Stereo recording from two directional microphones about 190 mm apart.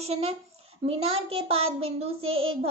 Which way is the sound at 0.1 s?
30° right (ahead or behind).